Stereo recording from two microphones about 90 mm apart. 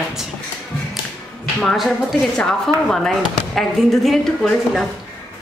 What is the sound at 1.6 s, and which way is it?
A woman's voice, centre (ahead or behind).